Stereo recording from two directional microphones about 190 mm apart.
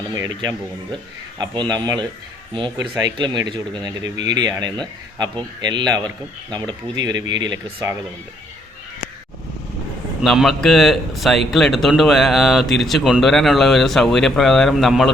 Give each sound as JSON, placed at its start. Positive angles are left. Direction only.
{"t": 0.1, "sound": "speech", "side_deg": -20}
{"t": 10.2, "sound": "speech", "side_deg": 0}